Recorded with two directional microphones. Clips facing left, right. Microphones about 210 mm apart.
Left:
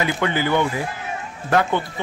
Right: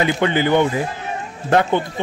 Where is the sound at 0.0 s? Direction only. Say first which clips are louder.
Right 4 dB; 25° right (ahead or behind).